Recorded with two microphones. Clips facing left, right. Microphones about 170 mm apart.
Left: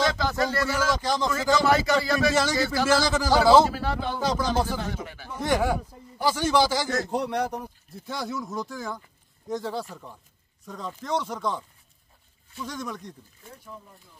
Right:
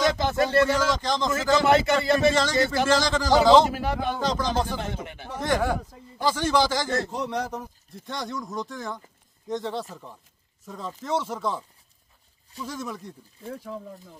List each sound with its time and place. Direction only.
0.2 s a man's voice: 25° right (ahead or behind)
0.9 s speech: 10° left (ahead or behind)
1.5 s a man's voice: 25° right (ahead or behind)
2.9 s speech: 10° left (ahead or behind)
3.6 s a man's voice: 20° right (ahead or behind)
4.2 s speech: 10° left (ahead or behind)
4.6 s a man's voice: 20° right (ahead or behind)
5.4 s speech: 10° left (ahead or behind)
7.1 s speech: 60° left (ahead or behind)
8.1 s speech: 5° left (ahead or behind)
12.6 s speech: 5° right (ahead or behind)
13.5 s speech: 90° right